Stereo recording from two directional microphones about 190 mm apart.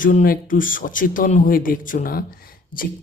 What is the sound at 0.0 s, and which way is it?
Speech, 45° left (ahead or behind).